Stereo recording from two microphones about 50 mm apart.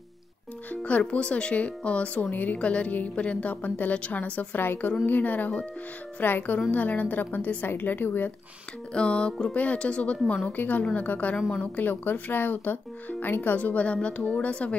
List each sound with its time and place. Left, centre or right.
0.7 s speech: left
8.9 s speech: left
10.5 s speech: left